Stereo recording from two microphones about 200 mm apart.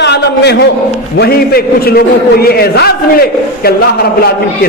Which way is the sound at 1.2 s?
50° left (ahead or behind).